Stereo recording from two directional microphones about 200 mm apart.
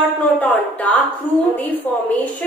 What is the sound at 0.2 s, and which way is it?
A woman's voice, 10° left (ahead or behind).